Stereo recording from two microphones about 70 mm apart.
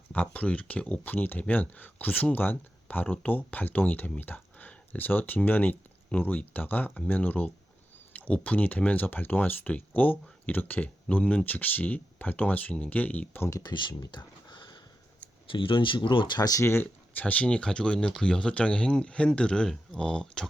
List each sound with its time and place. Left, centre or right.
0.1 s speech: centre
13.6 s speech: left
16.0 s speech: left
16.6 s speech: left; by 20.5 s centre